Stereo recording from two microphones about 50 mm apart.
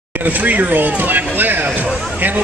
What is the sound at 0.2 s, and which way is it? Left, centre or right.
Speech, right.